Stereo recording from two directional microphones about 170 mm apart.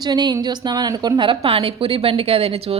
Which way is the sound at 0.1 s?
25° right (ahead or behind).